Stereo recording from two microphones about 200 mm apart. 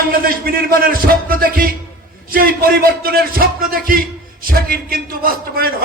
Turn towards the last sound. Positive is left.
turn(degrees=-45)  # may be behind; listen again after turning